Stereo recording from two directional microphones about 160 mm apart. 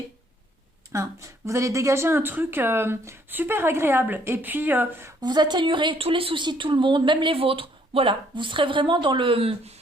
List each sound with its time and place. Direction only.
0.9 s speech: 20° right (ahead or behind)
5.2 s a woman's voice: 25° right (ahead or behind)